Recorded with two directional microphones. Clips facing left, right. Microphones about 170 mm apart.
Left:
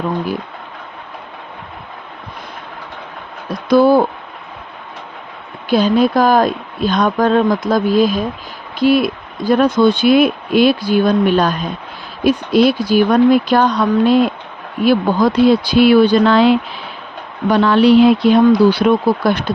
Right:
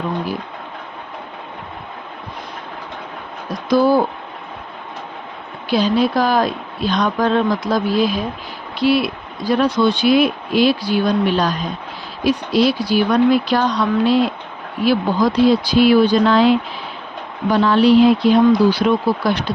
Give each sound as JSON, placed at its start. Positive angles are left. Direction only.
{"t": 3.7, "sound": "speech", "side_deg": 60}
{"t": 5.6, "sound": "speech", "side_deg": 50}